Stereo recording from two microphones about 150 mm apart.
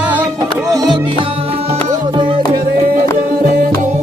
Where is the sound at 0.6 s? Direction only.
25° right (ahead or behind).